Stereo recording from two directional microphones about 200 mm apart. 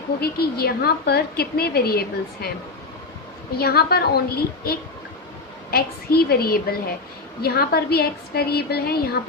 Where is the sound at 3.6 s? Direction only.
50° left (ahead or behind).